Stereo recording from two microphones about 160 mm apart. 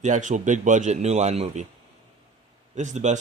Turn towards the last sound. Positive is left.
turn(degrees=-45)  # may be behind; listen again after turning